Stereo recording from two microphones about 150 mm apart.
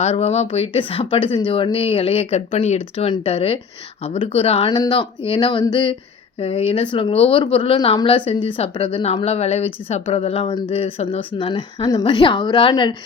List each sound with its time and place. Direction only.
0.0 s speech: 45° left (ahead or behind)